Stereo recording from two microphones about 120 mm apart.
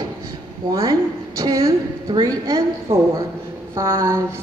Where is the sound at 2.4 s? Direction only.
30° right (ahead or behind).